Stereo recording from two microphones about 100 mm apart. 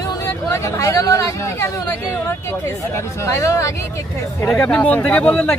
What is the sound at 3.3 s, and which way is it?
Speech, 30° left (ahead or behind).